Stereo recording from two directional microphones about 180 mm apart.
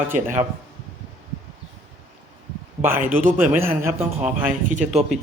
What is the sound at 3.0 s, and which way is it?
Speech, 50° right (ahead or behind).